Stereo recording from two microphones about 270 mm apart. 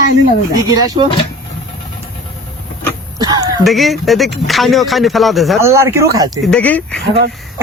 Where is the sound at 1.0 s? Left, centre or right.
Centre.